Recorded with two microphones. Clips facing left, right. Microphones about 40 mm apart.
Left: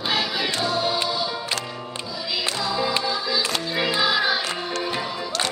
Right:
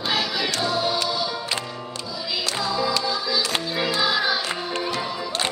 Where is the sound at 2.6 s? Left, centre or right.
Left.